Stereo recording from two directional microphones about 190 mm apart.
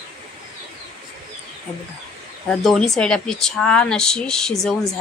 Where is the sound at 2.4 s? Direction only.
Centre (ahead or behind).